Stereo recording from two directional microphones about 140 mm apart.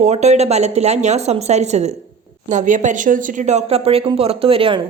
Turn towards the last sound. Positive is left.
turn(degrees=-40)  # may be behind; listen again after turning